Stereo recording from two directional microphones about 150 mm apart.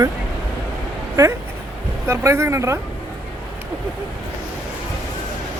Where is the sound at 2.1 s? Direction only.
20° right (ahead or behind).